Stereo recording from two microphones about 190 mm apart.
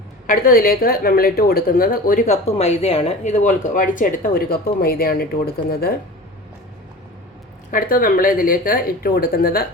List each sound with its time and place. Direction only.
0.3 s speech: 50° left (ahead or behind)
7.7 s speech: 45° left (ahead or behind)